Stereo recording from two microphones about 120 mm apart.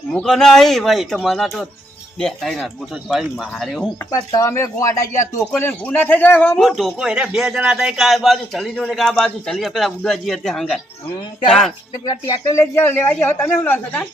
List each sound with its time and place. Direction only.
0.1 s a man's voice: 5° left (ahead or behind)
4.1 s a man's voice: 30° left (ahead or behind)
6.6 s a man's voice: centre (ahead or behind)
12.0 s speech: 25° left (ahead or behind)